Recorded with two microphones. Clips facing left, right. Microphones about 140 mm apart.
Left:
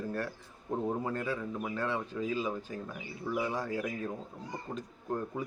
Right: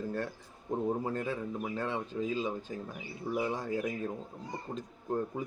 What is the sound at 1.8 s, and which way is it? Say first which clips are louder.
Speech: left 1 dB; 25° right (ahead or behind).